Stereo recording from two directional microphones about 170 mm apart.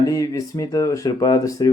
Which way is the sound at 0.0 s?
20° left (ahead or behind).